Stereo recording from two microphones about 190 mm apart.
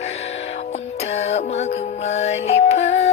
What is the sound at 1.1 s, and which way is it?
Music, 35° left (ahead or behind).